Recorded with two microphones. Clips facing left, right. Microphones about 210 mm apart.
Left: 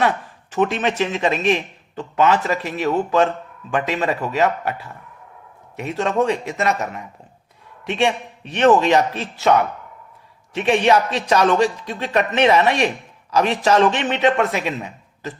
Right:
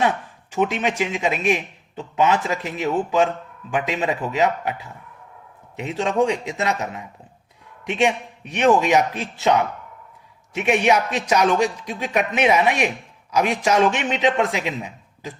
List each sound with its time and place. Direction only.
0.5 s a man's voice: 10° right (ahead or behind)